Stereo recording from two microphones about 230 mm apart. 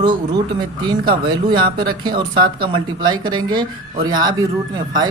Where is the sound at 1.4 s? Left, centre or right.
Centre.